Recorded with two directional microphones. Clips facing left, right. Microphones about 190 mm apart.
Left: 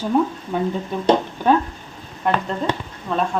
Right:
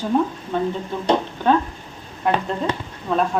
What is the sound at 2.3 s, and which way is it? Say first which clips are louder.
Speech: even; centre (ahead or behind).